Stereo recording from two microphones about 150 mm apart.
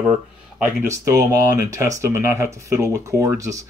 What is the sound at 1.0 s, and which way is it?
Speech, 20° right (ahead or behind).